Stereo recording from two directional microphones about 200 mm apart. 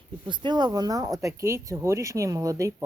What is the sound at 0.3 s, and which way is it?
Speech, 20° right (ahead or behind).